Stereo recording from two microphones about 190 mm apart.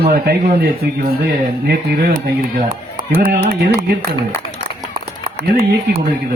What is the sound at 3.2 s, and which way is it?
Speech, 45° right (ahead or behind).